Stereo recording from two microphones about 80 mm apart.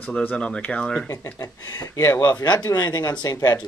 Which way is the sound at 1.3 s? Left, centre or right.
Left.